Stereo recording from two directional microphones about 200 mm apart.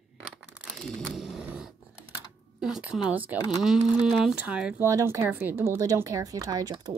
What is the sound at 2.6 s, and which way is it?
Speech, 5° right (ahead or behind).